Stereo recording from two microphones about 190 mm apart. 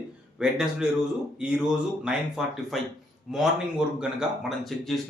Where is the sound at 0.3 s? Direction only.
5° right (ahead or behind).